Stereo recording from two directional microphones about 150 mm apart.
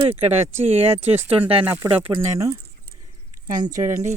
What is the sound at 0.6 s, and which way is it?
Speech, 40° right (ahead or behind).